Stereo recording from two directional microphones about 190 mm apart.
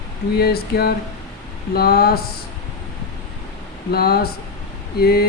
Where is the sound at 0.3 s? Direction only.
55° left (ahead or behind).